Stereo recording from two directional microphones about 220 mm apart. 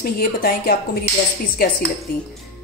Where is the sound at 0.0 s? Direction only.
45° left (ahead or behind).